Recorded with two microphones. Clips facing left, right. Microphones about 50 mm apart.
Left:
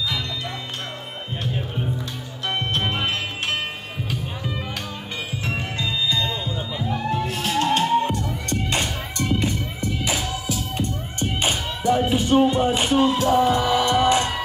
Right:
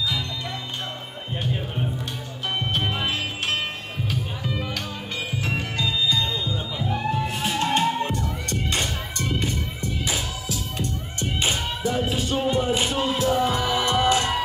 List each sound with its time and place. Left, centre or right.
2.8 s music: left
5.8 s music: left
7.5 s music: centre
11.9 s music: left
13.7 s music: right
14.0 s music: left